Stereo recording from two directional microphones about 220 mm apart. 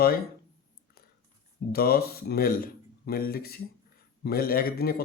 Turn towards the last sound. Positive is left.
turn(degrees=40)  # may be behind; listen again after turning